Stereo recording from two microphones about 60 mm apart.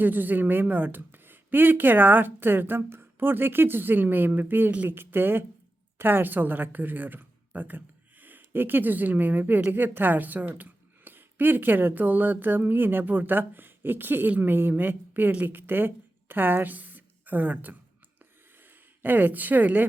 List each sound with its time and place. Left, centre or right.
0.0 s speech: right
4.9 s a woman's voice: right